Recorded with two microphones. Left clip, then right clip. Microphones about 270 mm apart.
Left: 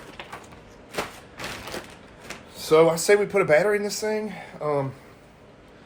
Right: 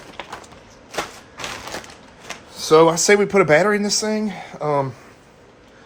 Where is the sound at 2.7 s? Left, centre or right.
Right.